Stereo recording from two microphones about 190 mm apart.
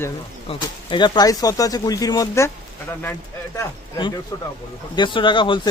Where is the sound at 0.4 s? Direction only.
25° left (ahead or behind).